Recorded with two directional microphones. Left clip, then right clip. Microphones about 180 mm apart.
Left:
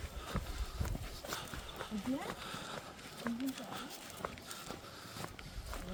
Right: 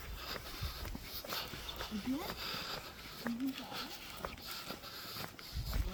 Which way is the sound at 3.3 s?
45° right (ahead or behind).